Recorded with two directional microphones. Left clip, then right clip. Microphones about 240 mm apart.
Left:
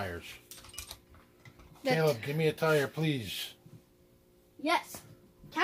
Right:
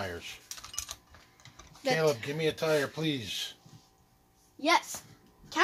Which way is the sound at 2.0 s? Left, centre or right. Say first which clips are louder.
Right 1 dB; left.